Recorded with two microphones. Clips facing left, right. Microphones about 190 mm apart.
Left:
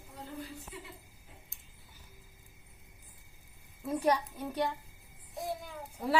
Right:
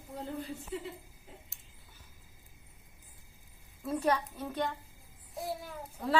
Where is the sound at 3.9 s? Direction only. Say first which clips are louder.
Left 1 dB; 15° left (ahead or behind).